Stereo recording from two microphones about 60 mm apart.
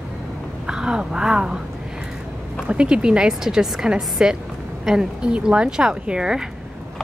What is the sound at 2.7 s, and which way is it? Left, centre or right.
A woman's voice, centre.